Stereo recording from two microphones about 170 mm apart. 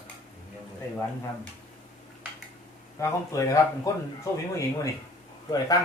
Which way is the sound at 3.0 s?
15° left (ahead or behind).